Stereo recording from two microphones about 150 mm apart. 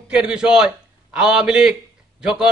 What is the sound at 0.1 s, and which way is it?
A man's voice, 5° right (ahead or behind).